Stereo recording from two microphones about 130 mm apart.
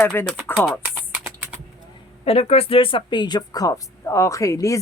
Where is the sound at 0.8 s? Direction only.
10° right (ahead or behind).